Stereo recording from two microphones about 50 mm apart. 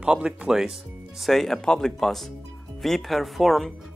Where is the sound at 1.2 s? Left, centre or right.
Centre.